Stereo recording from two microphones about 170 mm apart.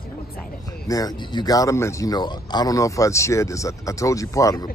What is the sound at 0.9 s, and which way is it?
Speech, 20° left (ahead or behind).